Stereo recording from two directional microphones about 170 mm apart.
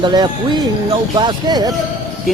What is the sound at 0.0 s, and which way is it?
Speech, 25° right (ahead or behind).